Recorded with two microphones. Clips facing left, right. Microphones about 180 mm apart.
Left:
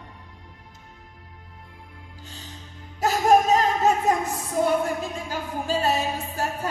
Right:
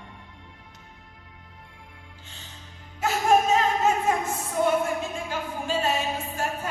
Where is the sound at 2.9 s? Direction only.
40° left (ahead or behind).